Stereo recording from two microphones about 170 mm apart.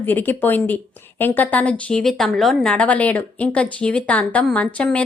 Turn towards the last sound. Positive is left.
turn(degrees=5)  # may be behind; listen again after turning